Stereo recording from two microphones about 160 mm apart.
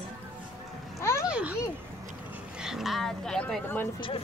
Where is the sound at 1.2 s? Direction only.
10° right (ahead or behind).